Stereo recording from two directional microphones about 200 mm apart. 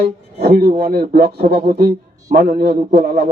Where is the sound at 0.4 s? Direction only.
50° right (ahead or behind).